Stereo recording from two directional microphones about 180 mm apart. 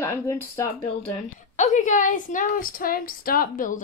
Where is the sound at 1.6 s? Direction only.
40° left (ahead or behind).